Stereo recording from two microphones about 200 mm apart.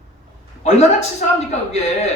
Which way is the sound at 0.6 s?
35° left (ahead or behind).